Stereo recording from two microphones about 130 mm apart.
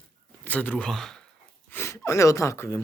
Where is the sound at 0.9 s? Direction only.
5° left (ahead or behind).